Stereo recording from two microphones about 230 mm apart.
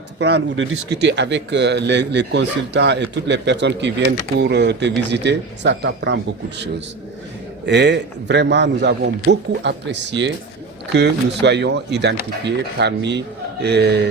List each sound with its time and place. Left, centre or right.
0.2 s a man's voice: right
7.6 s a man's voice: right